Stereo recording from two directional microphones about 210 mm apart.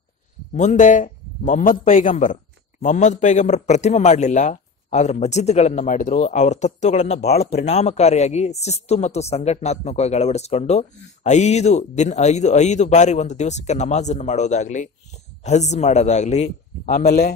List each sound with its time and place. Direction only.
0.6 s a man's voice: 35° left (ahead or behind)
17.0 s speech: 50° left (ahead or behind)